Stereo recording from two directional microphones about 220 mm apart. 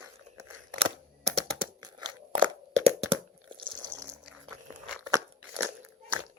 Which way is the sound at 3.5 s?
20° right (ahead or behind).